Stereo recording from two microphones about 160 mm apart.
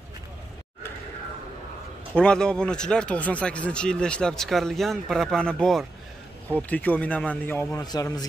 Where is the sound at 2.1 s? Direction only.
5° left (ahead or behind).